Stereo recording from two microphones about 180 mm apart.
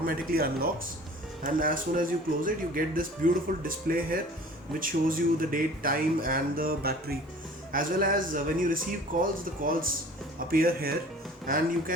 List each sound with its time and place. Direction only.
0.0 s speech: 55° right (ahead or behind)